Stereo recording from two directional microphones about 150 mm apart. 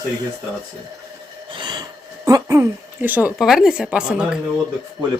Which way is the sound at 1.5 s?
30° right (ahead or behind).